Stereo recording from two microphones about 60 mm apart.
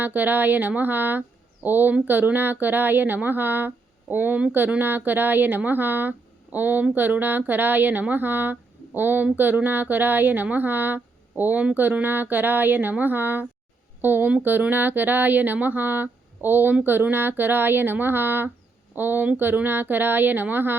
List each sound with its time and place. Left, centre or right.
0.0 s speech: right